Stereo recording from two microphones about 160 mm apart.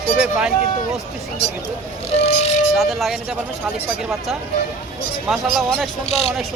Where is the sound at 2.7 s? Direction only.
Centre (ahead or behind).